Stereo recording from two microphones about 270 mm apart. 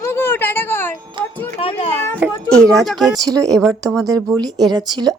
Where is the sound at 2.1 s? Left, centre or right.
Centre.